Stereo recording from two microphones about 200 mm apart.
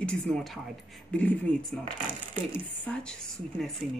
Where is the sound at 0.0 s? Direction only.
5° left (ahead or behind).